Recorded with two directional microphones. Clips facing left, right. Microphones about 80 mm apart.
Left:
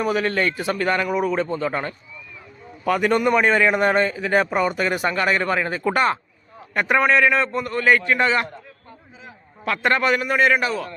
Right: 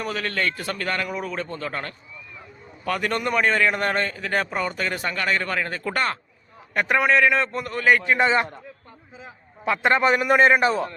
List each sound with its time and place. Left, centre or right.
0.0 s a man's voice: centre
6.7 s a man's voice: centre
8.1 s a man's voice: centre
9.2 s a sound: centre
10.2 s a man's voice: right